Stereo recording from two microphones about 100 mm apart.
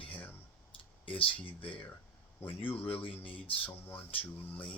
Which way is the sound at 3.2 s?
60° left (ahead or behind).